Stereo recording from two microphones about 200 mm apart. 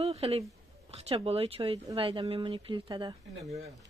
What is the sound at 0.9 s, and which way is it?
A woman's voice, 30° right (ahead or behind).